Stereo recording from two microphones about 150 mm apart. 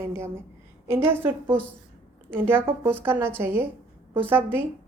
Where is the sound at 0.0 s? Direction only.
15° right (ahead or behind).